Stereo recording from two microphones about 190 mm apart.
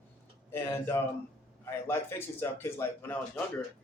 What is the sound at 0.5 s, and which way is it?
Speech, 15° left (ahead or behind).